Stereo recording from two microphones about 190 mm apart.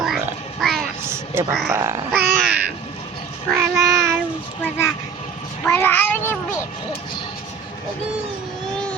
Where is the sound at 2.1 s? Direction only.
55° right (ahead or behind).